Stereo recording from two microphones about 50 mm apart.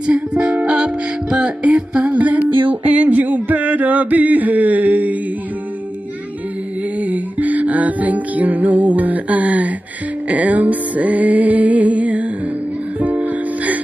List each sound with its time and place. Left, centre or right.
0.0 s music: right
2.1 s music: right
7.0 s music: right